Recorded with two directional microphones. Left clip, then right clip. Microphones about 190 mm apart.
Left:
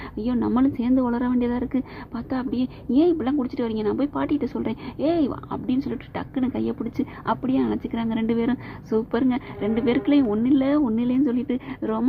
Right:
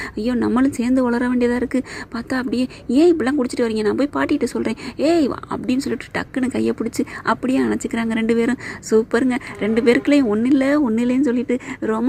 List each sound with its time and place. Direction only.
0.3 s a woman's voice: 20° right (ahead or behind)